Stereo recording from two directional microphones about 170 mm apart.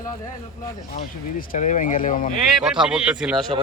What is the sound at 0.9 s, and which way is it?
Speech, 50° left (ahead or behind).